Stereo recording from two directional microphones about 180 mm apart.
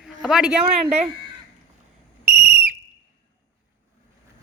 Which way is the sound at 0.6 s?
30° right (ahead or behind).